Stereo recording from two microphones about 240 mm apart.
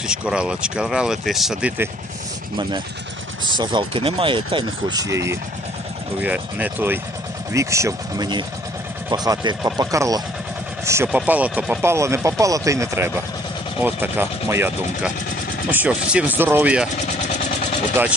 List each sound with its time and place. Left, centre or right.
0.1 s speech: centre
3.6 s speech: centre